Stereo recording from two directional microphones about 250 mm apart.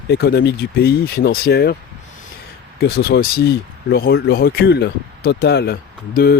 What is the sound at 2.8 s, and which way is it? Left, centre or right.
Speech, left.